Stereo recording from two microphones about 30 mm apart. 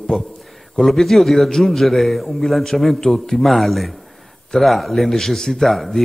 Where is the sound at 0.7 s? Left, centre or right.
Centre.